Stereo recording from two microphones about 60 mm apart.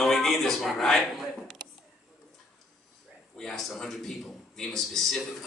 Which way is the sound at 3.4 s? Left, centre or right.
Centre.